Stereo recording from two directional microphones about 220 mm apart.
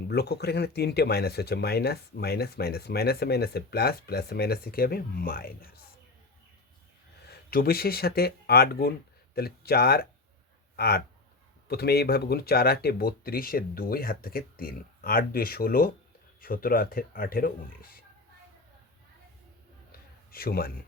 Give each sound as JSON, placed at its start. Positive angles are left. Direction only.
{"t": 0.1, "sound": "speech", "side_deg": 45}
{"t": 7.3, "sound": "speech", "side_deg": 45}
{"t": 19.9, "sound": "a sound", "side_deg": 45}